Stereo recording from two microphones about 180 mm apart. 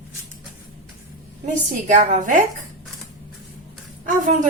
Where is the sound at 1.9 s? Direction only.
45° right (ahead or behind).